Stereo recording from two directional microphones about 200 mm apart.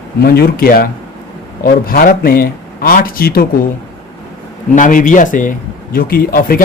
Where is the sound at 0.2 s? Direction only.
50° left (ahead or behind).